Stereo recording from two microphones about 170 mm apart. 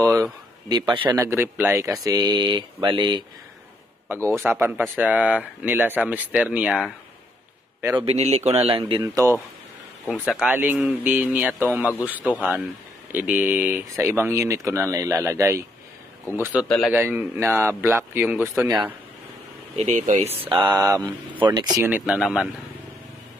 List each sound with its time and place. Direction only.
0.0 s a sound: 20° right (ahead or behind)
1.0 s speech: 15° right (ahead or behind)
4.1 s speech: 15° right (ahead or behind)
8.0 s a man's voice: 35° right (ahead or behind)
9.0 s speech: 20° right (ahead or behind)
10.0 s speech: 5° right (ahead or behind)
16.6 s speech: 5° left (ahead or behind)
16.9 s speech: 10° right (ahead or behind)
19.7 s a man's voice: 40° right (ahead or behind)
20.3 s speech: 30° right (ahead or behind)
21.8 s speech: 5° right (ahead or behind)